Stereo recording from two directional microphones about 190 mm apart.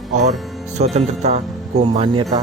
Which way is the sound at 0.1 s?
40° right (ahead or behind).